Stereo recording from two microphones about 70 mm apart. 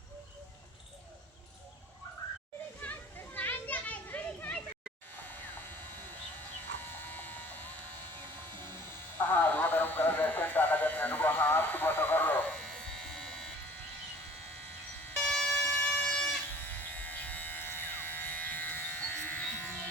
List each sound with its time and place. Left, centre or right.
2.8 s children playing: left
6.9 s electric shaver: left
9.1 s radio: left; by 13.5 s centre
15.1 s music: centre
15.5 s electric shaver: left